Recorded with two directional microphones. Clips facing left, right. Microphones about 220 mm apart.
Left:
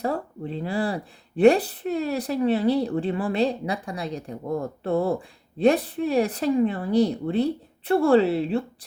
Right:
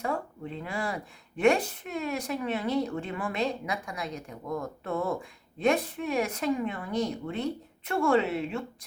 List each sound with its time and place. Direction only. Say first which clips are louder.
0.0 s a woman's voice: left 5 dB; 35° left (ahead or behind)